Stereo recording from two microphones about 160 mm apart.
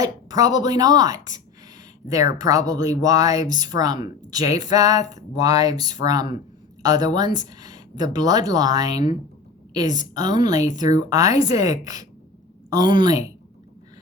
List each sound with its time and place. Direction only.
0.0 s speech: 20° right (ahead or behind)
10.0 s speech: 25° right (ahead or behind)